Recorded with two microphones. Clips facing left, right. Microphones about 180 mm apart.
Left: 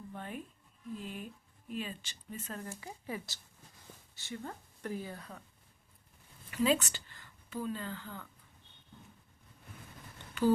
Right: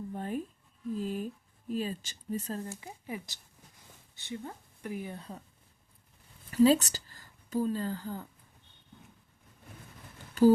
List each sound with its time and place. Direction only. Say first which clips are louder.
0.1 s a sound: right 7 dB; 40° right (ahead or behind)
0.9 s speech: right 9 dB; 40° right (ahead or behind)
6.5 s speech: right 7 dB; 35° right (ahead or behind)